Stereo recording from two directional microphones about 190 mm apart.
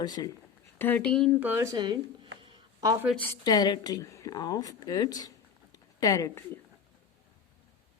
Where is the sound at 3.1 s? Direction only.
10° left (ahead or behind).